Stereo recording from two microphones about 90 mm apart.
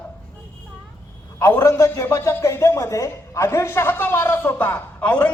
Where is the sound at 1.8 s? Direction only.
35° left (ahead or behind).